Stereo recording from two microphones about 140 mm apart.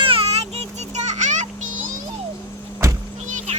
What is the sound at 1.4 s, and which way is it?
Music, 65° right (ahead or behind).